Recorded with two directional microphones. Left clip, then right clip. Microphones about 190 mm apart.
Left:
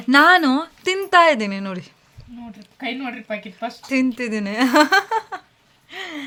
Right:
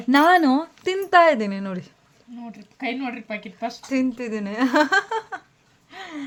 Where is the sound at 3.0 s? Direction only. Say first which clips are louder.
Left 2 dB; 15° left (ahead or behind).